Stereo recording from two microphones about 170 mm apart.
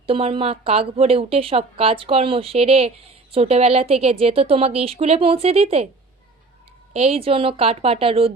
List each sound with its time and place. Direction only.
0.0 s a woman's voice: 35° right (ahead or behind)
6.9 s a woman's voice: 35° right (ahead or behind)